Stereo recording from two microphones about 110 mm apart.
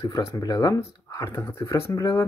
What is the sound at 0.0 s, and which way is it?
Speech, 30° left (ahead or behind).